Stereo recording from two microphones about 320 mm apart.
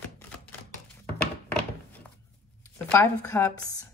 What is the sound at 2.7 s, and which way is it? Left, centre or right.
Speech, centre.